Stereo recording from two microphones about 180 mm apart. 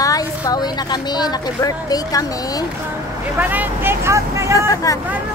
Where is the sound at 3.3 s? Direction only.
10° right (ahead or behind).